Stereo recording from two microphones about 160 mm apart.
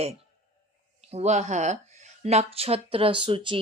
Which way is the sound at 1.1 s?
45° right (ahead or behind).